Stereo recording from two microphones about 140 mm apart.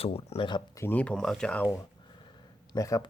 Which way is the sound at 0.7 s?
15° left (ahead or behind).